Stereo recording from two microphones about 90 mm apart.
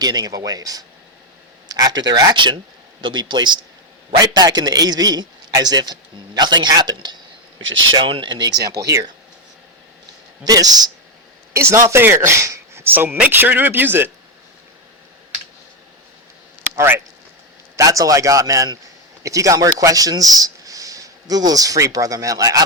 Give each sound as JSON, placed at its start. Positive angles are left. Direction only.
{"t": 0.0, "sound": "a man's voice", "side_deg": -45}
{"t": 2.3, "sound": "a man's voice", "side_deg": -65}
{"t": 7.9, "sound": "speech", "side_deg": -70}
{"t": 10.4, "sound": "a man's voice", "side_deg": -45}
{"t": 11.5, "sound": "speech", "side_deg": -30}
{"t": 16.7, "sound": "speech", "side_deg": -25}
{"t": 17.7, "sound": "a man's voice", "side_deg": -40}